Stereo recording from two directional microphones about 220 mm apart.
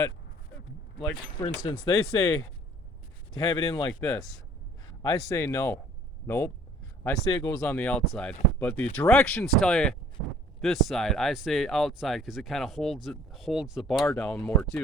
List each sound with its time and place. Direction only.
1.4 s speech: 20° left (ahead or behind)
3.3 s speech: 25° left (ahead or behind)
4.0 s speech: 5° left (ahead or behind)
5.3 s speech: 10° left (ahead or behind)